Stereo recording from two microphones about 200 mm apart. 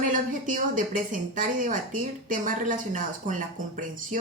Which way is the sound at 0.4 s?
40° right (ahead or behind).